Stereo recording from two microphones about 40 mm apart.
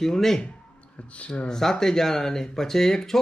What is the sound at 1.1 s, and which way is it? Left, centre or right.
Speech, left.